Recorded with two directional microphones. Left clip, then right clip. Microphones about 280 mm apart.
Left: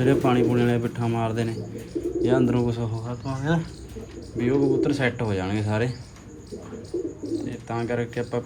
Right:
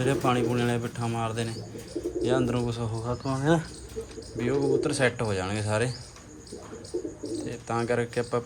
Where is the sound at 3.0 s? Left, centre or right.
Right.